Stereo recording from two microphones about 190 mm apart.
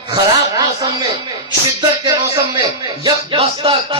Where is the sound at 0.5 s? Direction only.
20° right (ahead or behind).